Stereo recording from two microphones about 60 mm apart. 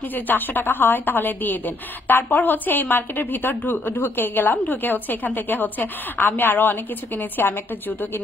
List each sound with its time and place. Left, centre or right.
0.1 s a woman's voice: left